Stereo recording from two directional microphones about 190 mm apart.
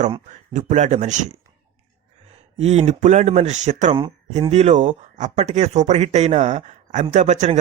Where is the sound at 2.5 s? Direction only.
35° right (ahead or behind).